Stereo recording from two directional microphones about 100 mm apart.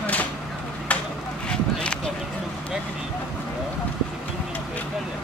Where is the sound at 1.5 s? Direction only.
10° left (ahead or behind).